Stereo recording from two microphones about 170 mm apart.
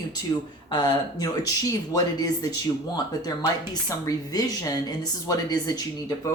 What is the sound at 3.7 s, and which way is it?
Speech, 25° left (ahead or behind).